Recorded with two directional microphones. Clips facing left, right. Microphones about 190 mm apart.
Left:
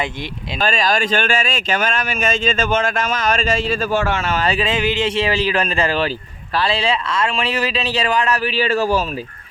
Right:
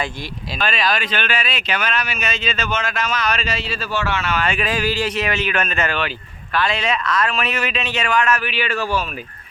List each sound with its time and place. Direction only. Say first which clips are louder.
0.6 s speech: left 3 dB; 40° left (ahead or behind)
4.6 s a man's voice: left 2 dB; 20° left (ahead or behind); by 9.0 s 40° left (ahead or behind)